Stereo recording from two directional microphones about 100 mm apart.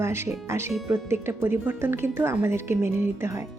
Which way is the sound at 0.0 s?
25° right (ahead or behind).